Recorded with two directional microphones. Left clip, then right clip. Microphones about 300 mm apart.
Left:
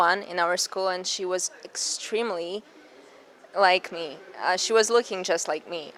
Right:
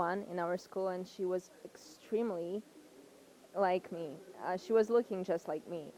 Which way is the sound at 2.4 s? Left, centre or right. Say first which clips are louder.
Left 8 dB; left.